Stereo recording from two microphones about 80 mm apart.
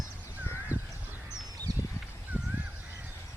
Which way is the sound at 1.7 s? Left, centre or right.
Right.